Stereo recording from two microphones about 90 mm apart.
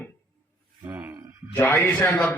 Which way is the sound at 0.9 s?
20° right (ahead or behind).